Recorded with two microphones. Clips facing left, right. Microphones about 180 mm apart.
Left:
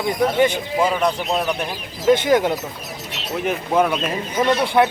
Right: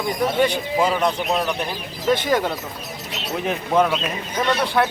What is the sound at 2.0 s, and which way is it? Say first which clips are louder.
Speech: left 4 dB; 15° left (ahead or behind).